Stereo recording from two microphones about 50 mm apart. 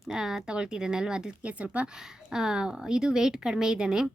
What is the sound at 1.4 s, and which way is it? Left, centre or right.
Speech, right.